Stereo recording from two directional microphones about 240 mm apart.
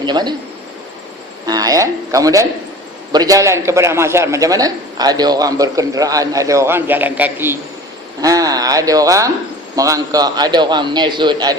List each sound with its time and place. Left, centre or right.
0.0 s a man's voice: centre
1.5 s a man's voice: centre